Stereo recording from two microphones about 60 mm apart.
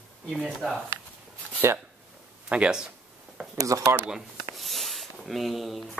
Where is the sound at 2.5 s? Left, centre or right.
Centre.